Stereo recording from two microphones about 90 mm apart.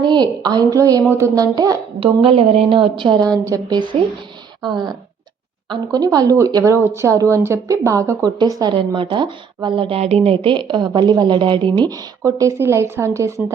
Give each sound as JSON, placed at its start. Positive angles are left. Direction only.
{"t": 0.0, "sound": "a woman's voice", "side_deg": -55}
{"t": 2.0, "sound": "a woman's voice", "side_deg": -90}
{"t": 3.3, "sound": "a woman's voice", "side_deg": -40}
{"t": 4.6, "sound": "a woman's voice", "side_deg": -55}
{"t": 8.7, "sound": "speech", "side_deg": -65}
{"t": 12.2, "sound": "a woman's voice", "side_deg": -35}